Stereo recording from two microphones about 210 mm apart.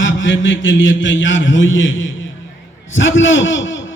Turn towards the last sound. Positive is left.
turn(degrees=65)  # may be behind; listen again after turning